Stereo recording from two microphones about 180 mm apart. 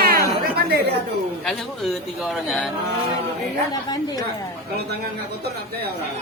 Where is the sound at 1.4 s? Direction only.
Centre (ahead or behind).